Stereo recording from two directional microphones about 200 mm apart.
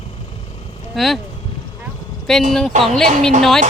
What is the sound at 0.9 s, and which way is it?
Speech, centre (ahead or behind).